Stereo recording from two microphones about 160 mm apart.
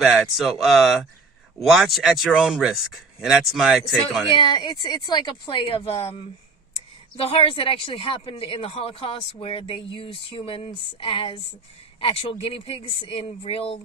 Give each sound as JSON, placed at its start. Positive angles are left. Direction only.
{"t": 0.0, "sound": "speech", "side_deg": 0}
{"t": 4.4, "sound": "a woman's voice", "side_deg": 30}
{"t": 7.2, "sound": "speech", "side_deg": 35}